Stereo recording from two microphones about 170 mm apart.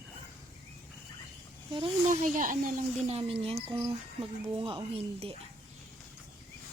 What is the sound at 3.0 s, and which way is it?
Speech, 35° right (ahead or behind).